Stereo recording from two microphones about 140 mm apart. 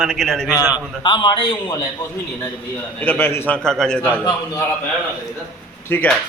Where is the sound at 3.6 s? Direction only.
5° left (ahead or behind).